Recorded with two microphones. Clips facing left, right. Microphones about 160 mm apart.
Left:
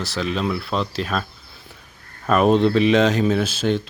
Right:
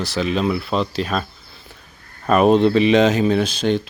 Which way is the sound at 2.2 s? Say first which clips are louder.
Right 2 dB; centre (ahead or behind).